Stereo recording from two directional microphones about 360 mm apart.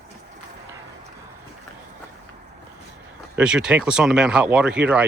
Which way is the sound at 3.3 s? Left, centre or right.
Centre.